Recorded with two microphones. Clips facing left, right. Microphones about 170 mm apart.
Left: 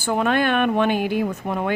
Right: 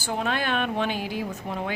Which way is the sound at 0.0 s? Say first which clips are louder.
Left 7 dB; 55° left (ahead or behind).